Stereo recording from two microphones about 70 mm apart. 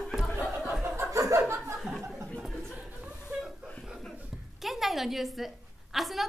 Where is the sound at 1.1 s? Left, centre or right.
Right.